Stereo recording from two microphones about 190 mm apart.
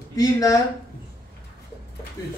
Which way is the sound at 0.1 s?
20° left (ahead or behind).